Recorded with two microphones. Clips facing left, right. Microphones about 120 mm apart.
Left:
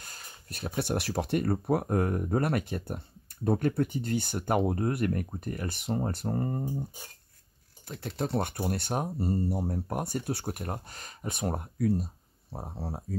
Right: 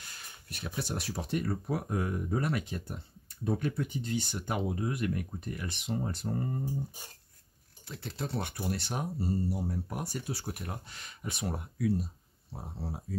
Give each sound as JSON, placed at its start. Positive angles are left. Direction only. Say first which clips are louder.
{"t": 0.0, "sound": "speech", "louder": "left 2 dB", "side_deg": 45}
{"t": 7.8, "sound": "speech", "louder": "left 5 dB", "side_deg": 50}